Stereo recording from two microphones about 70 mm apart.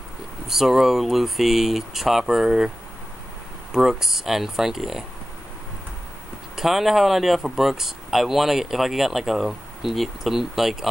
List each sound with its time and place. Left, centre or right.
0.5 s speech: centre
3.7 s speech: centre
6.5 s speech: centre